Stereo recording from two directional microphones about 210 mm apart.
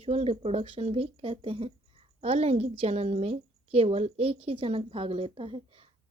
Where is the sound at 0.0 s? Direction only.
30° right (ahead or behind).